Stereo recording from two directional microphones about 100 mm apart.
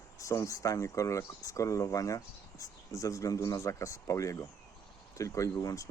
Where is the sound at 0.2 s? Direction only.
30° left (ahead or behind).